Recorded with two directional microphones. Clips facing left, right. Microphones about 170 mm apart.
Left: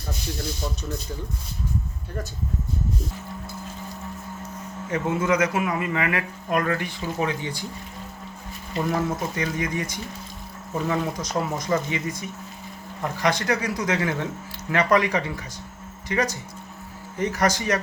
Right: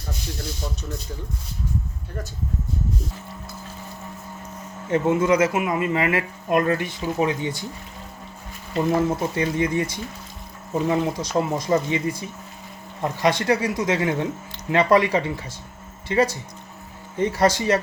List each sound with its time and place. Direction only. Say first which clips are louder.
4.9 s speech: right 4 dB; 25° right (ahead or behind)
9.0 s speech: right 4 dB; 30° right (ahead or behind)